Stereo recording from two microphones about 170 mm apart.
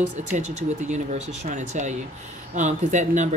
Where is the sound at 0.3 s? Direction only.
45° right (ahead or behind).